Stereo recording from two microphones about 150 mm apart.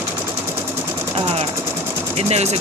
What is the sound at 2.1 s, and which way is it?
Speech, 45° right (ahead or behind).